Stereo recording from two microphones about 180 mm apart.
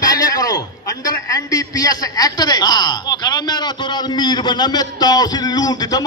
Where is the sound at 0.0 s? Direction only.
20° left (ahead or behind).